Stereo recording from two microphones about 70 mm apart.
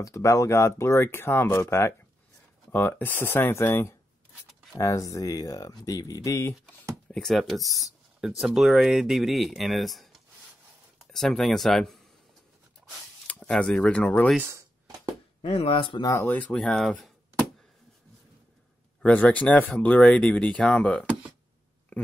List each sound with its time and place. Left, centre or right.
0.0 s speech: left
4.7 s speech: left
7.1 s speech: centre
13.3 s speech: centre
15.9 s speech: left
16.3 s speech: left
16.5 s speech: centre
19.0 s speech: left
21.9 s a sound: left